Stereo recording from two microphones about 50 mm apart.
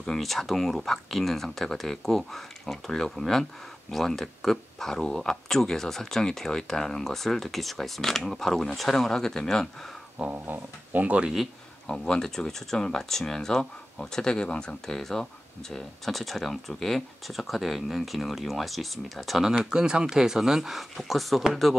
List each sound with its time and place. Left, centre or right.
0.0 s speech: centre
10.3 s speech: right
12.0 s speech: centre